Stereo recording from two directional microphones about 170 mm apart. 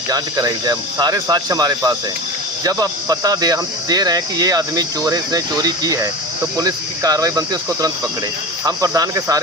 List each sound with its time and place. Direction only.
0.1 s speech: 20° right (ahead or behind)